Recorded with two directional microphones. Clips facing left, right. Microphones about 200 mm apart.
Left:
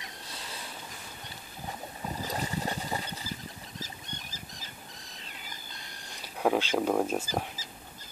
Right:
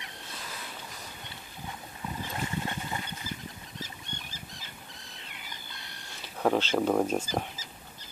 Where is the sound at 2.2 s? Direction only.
35° left (ahead or behind).